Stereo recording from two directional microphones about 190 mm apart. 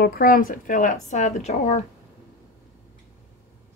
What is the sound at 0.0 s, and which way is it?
A woman's voice, 50° left (ahead or behind).